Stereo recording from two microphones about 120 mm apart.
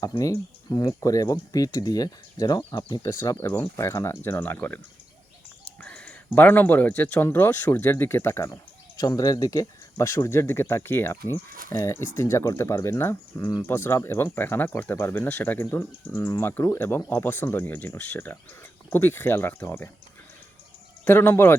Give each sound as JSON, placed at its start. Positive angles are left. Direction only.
{"t": 0.2, "sound": "speech", "side_deg": 30}
{"t": 3.3, "sound": "speech", "side_deg": 15}
{"t": 5.8, "sound": "speech", "side_deg": 10}
{"t": 9.0, "sound": "speech", "side_deg": 30}
{"t": 21.0, "sound": "speech", "side_deg": 20}